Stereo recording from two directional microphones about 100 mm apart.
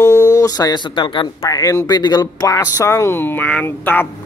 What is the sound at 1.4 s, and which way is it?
Speech, 30° left (ahead or behind).